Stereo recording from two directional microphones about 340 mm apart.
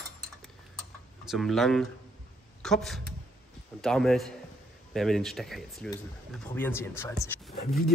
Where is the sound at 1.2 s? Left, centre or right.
Centre.